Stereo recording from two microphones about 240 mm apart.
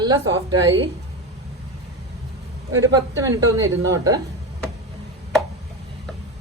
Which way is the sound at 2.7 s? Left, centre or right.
Centre.